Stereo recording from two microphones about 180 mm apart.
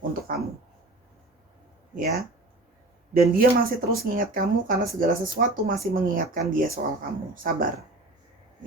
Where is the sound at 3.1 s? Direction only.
55° right (ahead or behind).